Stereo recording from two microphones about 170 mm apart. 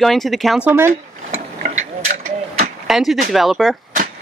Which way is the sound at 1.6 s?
60° right (ahead or behind).